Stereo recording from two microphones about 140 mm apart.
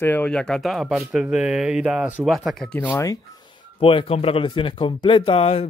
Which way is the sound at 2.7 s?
20° left (ahead or behind).